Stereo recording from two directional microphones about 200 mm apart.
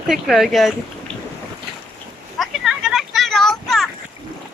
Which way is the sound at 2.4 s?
Centre (ahead or behind).